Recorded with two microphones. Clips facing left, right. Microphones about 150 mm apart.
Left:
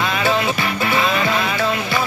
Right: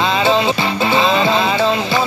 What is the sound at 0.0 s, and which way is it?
Music, 25° right (ahead or behind).